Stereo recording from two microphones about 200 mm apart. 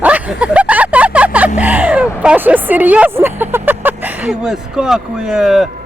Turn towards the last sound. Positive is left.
turn(degrees=0)  # may be behind; listen again after turning